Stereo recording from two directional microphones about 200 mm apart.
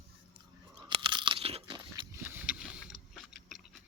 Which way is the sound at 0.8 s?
25° right (ahead or behind).